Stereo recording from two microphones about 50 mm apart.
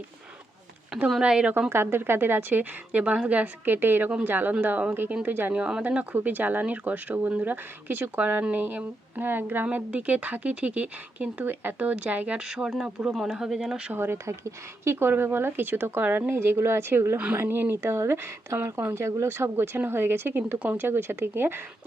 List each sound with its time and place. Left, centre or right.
1.2 s speech: right
1.7 s a woman's voice: right
5.5 s speech: centre
6.1 s speech: right
7.5 s speech: right
9.6 s speech: right
12.4 s speech: centre
13.9 s a woman's voice: right
14.3 s speech: right
14.9 s a woman's voice: right
16.3 s speech: right
17.3 s speech: right
19.3 s a woman's voice: right